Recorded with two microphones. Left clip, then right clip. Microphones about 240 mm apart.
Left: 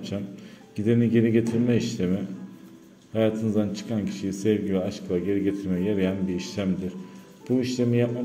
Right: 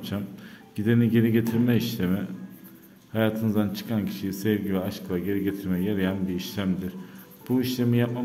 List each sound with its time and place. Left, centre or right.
0.7 s speech: centre